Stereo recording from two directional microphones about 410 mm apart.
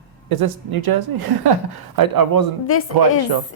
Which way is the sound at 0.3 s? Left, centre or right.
Right.